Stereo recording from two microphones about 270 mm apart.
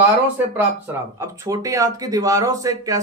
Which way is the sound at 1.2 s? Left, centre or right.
Centre.